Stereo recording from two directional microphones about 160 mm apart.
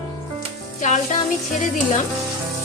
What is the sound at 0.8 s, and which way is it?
Music, 45° left (ahead or behind).